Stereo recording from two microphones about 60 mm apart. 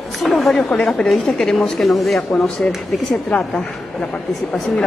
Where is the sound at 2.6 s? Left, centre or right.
Centre.